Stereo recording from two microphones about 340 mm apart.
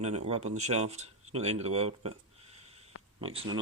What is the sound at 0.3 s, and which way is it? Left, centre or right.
Speech, centre.